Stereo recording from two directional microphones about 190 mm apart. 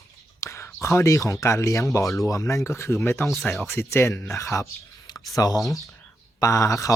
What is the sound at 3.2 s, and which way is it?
Speech, centre (ahead or behind).